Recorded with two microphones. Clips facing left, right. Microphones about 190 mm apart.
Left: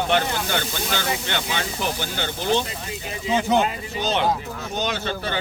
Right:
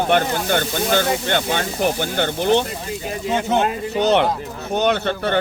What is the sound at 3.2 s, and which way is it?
Speech, centre (ahead or behind).